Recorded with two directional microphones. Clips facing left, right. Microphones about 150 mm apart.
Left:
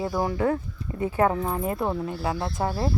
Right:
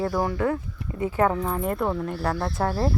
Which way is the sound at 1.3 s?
10° left (ahead or behind).